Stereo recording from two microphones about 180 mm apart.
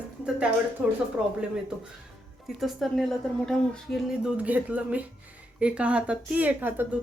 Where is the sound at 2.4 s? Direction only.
Centre (ahead or behind).